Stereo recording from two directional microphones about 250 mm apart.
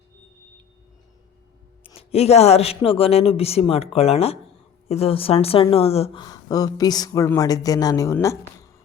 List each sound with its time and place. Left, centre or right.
1.8 s a woman's voice: left